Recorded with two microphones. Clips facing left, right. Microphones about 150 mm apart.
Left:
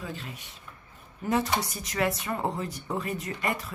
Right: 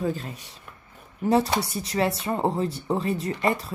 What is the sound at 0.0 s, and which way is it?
Speech, 40° right (ahead or behind).